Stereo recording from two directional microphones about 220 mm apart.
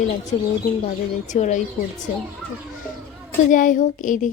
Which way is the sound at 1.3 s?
35° left (ahead or behind).